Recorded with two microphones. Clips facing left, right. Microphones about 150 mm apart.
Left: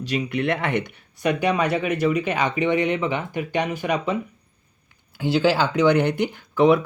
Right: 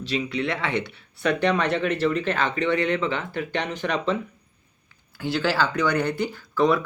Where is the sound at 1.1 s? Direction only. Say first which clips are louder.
Left 1 dB; 10° left (ahead or behind).